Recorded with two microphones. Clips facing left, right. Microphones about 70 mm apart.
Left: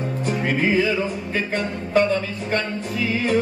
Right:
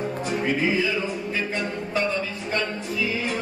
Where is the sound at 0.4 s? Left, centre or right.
Left.